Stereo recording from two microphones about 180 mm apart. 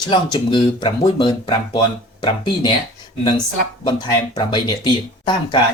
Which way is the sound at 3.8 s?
25° left (ahead or behind).